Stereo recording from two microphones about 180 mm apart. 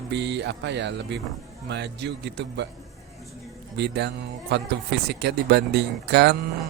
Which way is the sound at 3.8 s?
70° right (ahead or behind).